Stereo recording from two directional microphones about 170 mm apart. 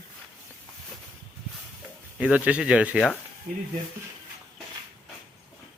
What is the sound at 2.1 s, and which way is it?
Speech, 5° right (ahead or behind).